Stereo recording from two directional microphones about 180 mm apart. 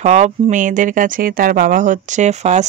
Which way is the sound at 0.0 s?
40° right (ahead or behind).